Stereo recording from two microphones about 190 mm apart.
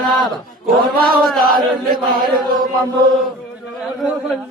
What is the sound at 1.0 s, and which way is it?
Chant, 50° right (ahead or behind).